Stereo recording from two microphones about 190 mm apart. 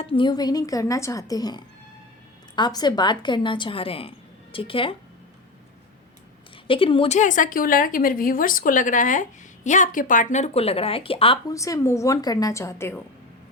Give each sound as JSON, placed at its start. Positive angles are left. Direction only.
{"t": 0.0, "sound": "speech", "side_deg": 25}
{"t": 6.7, "sound": "a woman's voice", "side_deg": 25}
{"t": 11.5, "sound": "a woman's voice", "side_deg": 15}